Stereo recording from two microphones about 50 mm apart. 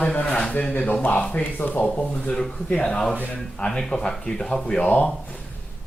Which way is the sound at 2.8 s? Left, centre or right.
Centre.